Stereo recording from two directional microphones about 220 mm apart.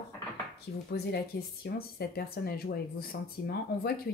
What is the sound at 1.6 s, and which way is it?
Speech, 45° left (ahead or behind).